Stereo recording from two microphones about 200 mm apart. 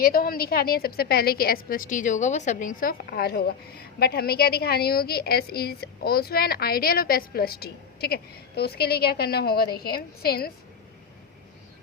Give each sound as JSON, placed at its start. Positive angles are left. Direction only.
{"t": 0.0, "sound": "a woman's voice", "side_deg": 45}